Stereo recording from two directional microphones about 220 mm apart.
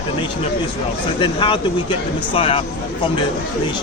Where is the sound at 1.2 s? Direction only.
20° left (ahead or behind).